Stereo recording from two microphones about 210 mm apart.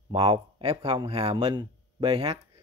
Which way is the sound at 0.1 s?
25° right (ahead or behind).